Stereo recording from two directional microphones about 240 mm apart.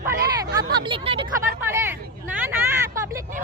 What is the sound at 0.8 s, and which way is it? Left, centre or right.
Speech, right.